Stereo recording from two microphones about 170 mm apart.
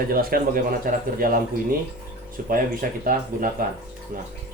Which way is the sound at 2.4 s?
55° right (ahead or behind).